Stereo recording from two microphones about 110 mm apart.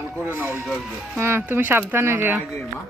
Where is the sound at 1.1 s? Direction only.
20° right (ahead or behind).